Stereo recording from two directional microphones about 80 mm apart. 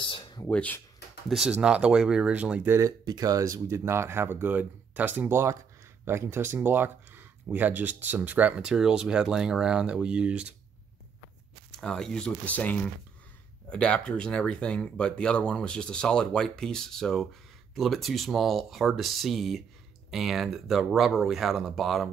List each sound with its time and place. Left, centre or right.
0.0 s a sound: left
0.5 s speech: centre
1.5 s speech: centre
3.1 s speech: right
5.3 s speech: right; by 10.5 s centre
11.7 s speech: centre